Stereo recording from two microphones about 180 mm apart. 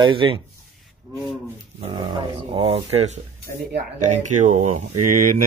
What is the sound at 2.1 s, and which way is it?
Speech, 30° right (ahead or behind).